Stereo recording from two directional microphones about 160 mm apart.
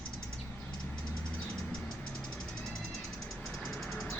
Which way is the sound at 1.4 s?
Centre (ahead or behind).